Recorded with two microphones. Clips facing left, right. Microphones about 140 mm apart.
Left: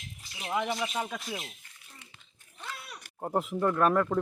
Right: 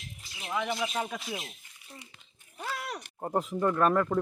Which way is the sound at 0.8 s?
5° right (ahead or behind).